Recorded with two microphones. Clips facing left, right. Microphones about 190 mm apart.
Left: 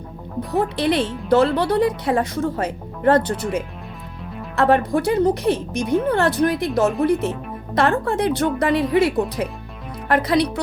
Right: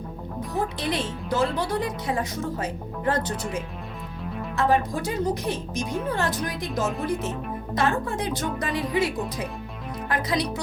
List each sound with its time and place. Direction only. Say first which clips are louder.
0.5 s speech: left 8 dB; 65° left (ahead or behind)